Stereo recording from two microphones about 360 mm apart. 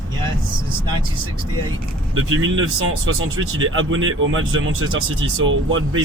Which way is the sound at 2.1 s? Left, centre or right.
Right.